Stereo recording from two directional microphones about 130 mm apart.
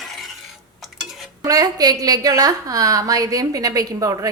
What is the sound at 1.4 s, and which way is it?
A woman's voice, 30° right (ahead or behind).